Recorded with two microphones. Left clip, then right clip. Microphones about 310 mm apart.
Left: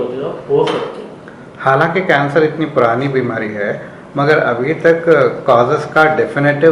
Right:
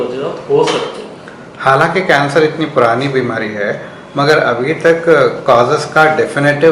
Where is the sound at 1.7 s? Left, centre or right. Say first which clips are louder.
Right 2 dB; centre.